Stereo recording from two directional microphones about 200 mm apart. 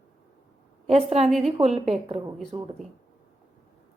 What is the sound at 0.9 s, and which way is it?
A woman's voice, 30° right (ahead or behind).